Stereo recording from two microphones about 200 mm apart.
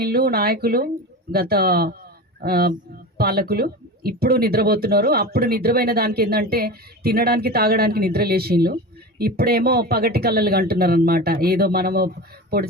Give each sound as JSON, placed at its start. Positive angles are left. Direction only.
{"t": 0.0, "sound": "speech", "side_deg": -50}